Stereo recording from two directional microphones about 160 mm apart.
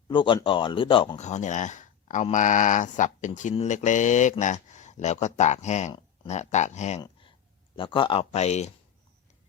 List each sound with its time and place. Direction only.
0.1 s speech: 30° left (ahead or behind)
1.2 s speech: 45° left (ahead or behind)
7.0 s a sound: 30° left (ahead or behind)
7.8 s speech: 30° left (ahead or behind)